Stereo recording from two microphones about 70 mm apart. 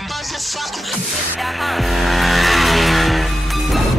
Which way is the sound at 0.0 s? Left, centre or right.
Centre.